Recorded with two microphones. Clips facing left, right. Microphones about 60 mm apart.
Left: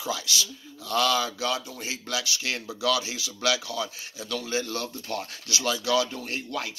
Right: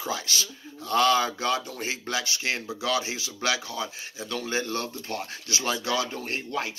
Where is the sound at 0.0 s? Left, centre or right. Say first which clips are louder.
Even; right.